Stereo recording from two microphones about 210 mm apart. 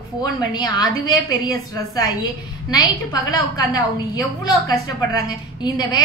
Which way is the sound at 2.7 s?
15° left (ahead or behind).